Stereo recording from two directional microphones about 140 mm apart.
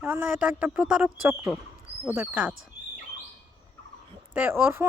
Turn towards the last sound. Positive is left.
turn(degrees=-15)  # may be behind; listen again after turning